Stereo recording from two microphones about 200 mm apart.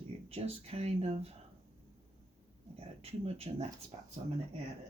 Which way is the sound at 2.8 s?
30° right (ahead or behind).